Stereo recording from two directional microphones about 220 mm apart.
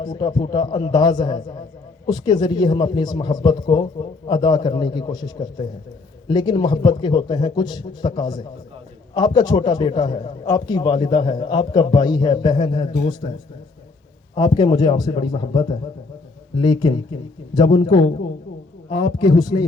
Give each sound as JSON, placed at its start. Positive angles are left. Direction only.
{"t": 0.0, "sound": "a man's voice", "side_deg": 20}
{"t": 14.3, "sound": "a man's voice", "side_deg": 20}